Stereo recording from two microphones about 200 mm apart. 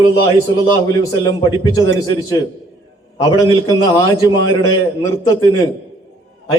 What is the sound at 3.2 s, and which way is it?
A man's voice, 20° left (ahead or behind).